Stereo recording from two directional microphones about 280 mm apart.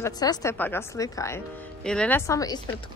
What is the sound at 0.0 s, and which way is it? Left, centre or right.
Speech, centre.